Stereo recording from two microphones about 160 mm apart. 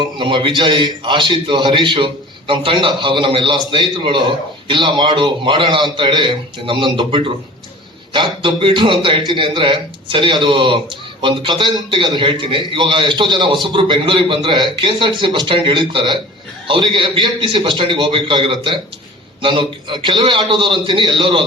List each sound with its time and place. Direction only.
0.0 s a man's voice: 30° right (ahead or behind)